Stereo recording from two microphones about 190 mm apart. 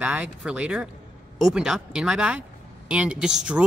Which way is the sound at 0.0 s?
5° right (ahead or behind).